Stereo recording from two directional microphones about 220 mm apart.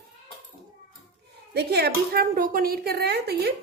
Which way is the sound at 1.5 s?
45° right (ahead or behind).